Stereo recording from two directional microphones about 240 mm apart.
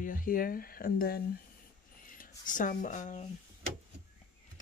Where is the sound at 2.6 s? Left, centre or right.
Left.